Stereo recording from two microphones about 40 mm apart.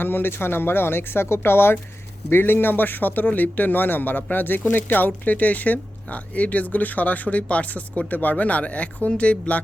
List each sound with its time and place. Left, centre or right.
0.0 s speech: left
2.3 s a man's voice: left